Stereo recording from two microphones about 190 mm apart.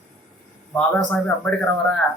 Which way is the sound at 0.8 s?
5° left (ahead or behind).